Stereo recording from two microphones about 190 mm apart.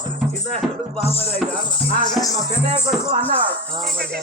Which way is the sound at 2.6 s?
35° right (ahead or behind).